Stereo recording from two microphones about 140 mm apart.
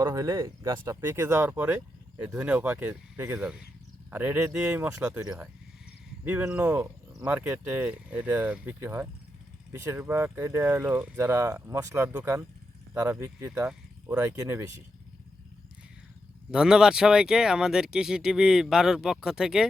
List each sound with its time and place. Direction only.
0.0 s speech: 25° right (ahead or behind)
16.5 s speech: 5° right (ahead or behind)